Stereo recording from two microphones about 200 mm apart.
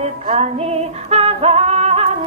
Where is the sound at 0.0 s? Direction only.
35° right (ahead or behind).